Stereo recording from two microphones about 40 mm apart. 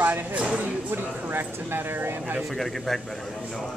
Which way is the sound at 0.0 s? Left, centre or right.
Right.